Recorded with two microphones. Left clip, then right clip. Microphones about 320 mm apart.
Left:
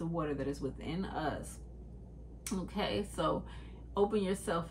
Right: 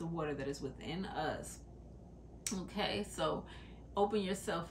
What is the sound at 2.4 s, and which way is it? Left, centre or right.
Speech, centre.